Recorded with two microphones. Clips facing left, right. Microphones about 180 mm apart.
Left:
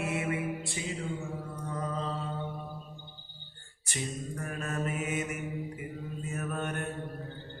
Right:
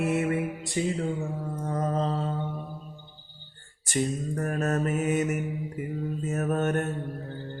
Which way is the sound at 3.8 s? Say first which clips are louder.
Right 9 dB; 45° right (ahead or behind).